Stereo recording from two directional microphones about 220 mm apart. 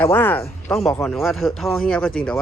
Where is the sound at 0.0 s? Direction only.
10° left (ahead or behind).